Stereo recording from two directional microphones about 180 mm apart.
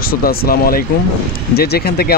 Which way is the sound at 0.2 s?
55° left (ahead or behind).